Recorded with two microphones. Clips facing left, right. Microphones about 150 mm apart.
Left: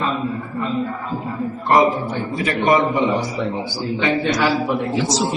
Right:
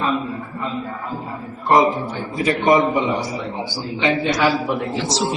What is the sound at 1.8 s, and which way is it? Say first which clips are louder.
Speech: left 1 dB; centre (ahead or behind).